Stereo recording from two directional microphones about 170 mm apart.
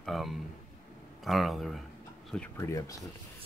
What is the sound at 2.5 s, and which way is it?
Speech, 15° left (ahead or behind).